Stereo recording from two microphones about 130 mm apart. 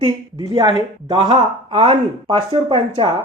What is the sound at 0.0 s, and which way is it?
A woman's voice, 40° right (ahead or behind).